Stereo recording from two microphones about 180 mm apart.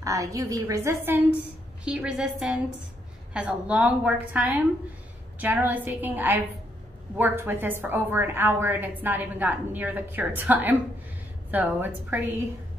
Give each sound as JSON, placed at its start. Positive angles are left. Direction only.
{"t": 0.0, "sound": "a woman's voice", "side_deg": -20}